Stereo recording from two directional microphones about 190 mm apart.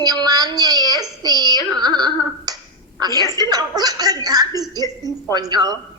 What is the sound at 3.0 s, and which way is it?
A woman's voice, 20° right (ahead or behind).